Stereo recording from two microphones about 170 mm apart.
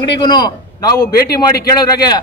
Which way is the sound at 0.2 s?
25° left (ahead or behind).